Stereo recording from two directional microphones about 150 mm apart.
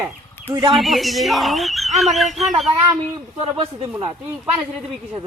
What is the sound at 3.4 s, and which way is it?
Speech, 35° right (ahead or behind).